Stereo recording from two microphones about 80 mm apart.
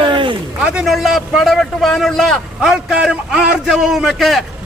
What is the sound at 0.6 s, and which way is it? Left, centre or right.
A man's voice, centre.